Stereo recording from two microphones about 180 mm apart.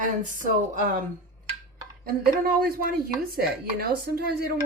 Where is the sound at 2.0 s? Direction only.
55° right (ahead or behind).